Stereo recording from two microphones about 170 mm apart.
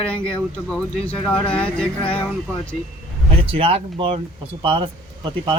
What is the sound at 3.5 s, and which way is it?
Speech, 35° right (ahead or behind).